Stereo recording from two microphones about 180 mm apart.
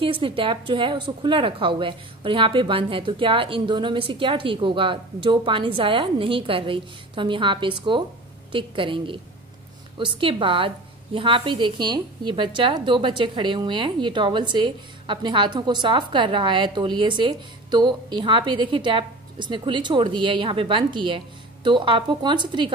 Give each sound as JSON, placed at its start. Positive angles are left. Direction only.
{"t": 0.0, "sound": "a woman's voice", "side_deg": -30}